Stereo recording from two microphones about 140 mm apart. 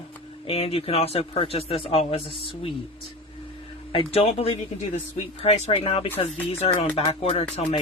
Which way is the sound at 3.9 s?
40° left (ahead or behind).